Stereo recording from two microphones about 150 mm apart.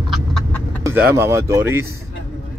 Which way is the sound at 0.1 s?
5° left (ahead or behind).